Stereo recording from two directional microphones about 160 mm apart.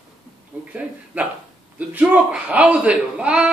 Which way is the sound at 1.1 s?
10° right (ahead or behind).